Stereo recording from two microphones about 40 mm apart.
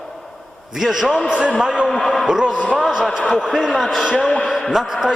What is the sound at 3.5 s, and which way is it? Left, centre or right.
Speech, centre.